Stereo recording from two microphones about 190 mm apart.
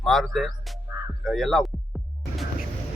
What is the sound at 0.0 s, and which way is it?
Speech, centre (ahead or behind).